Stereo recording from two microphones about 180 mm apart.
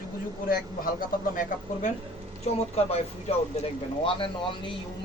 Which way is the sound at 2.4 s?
35° left (ahead or behind).